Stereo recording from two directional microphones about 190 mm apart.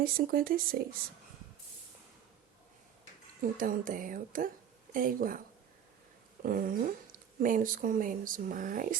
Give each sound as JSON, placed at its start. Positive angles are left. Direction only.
{"t": 0.0, "sound": "speech", "side_deg": -50}
{"t": 3.4, "sound": "speech", "side_deg": -45}
{"t": 6.4, "sound": "speech", "side_deg": -50}